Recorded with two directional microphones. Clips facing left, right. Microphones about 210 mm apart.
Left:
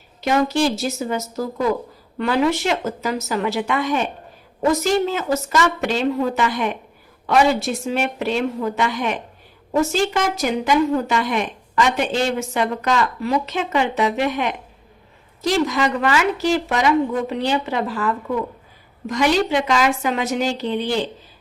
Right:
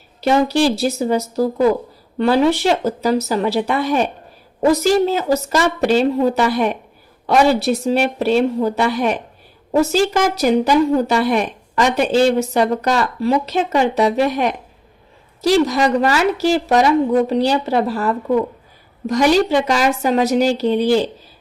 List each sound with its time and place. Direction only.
0.2 s a woman's voice: 30° right (ahead or behind)